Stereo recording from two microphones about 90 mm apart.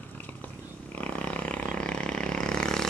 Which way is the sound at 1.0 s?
15° left (ahead or behind).